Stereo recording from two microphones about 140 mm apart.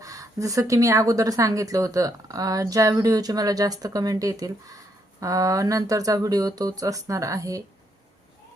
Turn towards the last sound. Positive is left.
turn(degrees=-25)  # may be behind; listen again after turning